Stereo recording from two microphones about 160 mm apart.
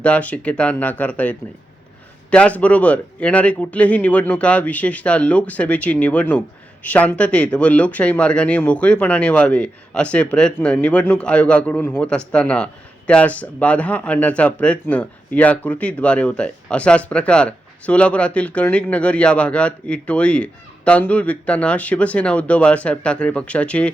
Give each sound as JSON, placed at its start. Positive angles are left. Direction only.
{"t": 0.0, "sound": "speech", "side_deg": 10}